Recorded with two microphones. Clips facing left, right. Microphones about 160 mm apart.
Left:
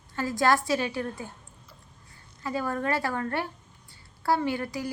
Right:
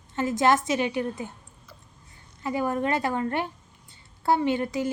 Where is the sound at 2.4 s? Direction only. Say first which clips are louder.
Right 3 dB; 20° right (ahead or behind).